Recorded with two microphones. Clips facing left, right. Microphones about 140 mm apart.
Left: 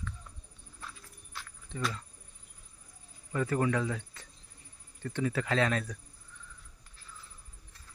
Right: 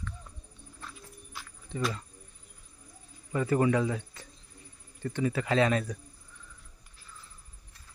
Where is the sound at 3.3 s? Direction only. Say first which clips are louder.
Right 4 dB; 10° right (ahead or behind).